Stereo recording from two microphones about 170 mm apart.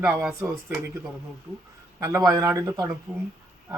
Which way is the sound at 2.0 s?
20° right (ahead or behind).